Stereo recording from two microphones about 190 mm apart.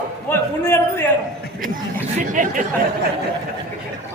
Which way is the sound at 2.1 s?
40° right (ahead or behind).